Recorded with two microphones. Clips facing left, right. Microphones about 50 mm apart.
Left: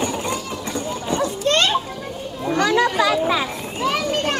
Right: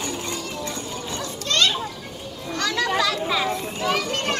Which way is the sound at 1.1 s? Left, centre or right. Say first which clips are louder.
Left 8 dB; left.